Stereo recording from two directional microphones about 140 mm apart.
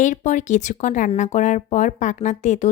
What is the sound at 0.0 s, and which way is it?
Speech, 60° left (ahead or behind).